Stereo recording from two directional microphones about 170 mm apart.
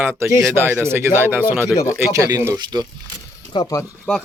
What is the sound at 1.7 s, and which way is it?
Speech, 15° left (ahead or behind).